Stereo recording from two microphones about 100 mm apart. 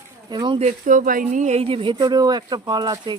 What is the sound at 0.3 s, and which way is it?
Speech, 50° right (ahead or behind).